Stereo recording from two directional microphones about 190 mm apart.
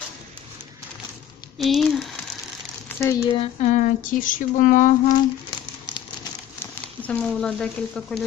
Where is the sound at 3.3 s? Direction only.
35° left (ahead or behind).